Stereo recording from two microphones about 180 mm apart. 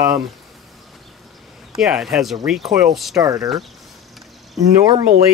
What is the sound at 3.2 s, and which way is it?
Speech, 20° right (ahead or behind).